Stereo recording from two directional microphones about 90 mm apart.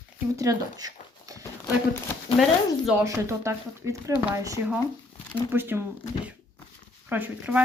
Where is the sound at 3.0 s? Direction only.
35° right (ahead or behind).